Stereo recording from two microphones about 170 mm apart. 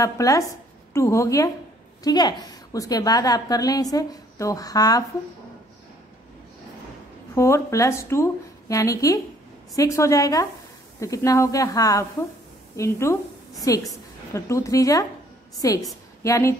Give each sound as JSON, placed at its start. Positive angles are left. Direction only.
{"t": 0.0, "sound": "a woman's voice", "side_deg": 20}
{"t": 7.3, "sound": "a woman's voice", "side_deg": 15}